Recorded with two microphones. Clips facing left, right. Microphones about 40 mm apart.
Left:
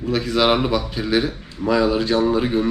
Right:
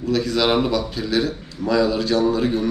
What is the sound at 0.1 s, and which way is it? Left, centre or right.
Speech, left.